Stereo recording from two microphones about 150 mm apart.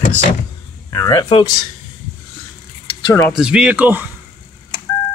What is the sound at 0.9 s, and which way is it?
Speech, 20° left (ahead or behind).